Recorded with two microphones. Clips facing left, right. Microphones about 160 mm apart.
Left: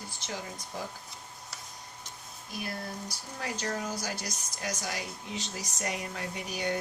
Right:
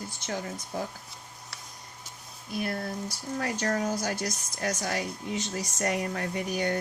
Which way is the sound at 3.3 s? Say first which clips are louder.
Right 6 dB; 50° right (ahead or behind).